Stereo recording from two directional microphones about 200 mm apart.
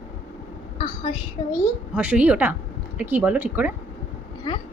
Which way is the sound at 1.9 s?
5° right (ahead or behind).